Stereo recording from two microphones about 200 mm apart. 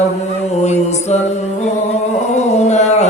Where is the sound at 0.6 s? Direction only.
35° left (ahead or behind).